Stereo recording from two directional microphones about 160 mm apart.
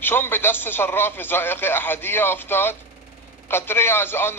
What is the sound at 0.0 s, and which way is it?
A man's voice, 15° left (ahead or behind).